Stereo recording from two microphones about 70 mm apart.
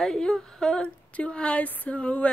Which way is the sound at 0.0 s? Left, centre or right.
Centre.